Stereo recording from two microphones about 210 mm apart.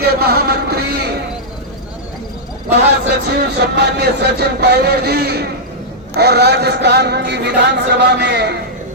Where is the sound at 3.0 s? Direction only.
55° right (ahead or behind).